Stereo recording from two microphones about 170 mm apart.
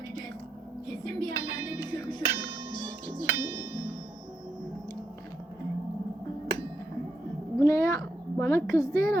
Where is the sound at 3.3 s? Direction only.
10° right (ahead or behind).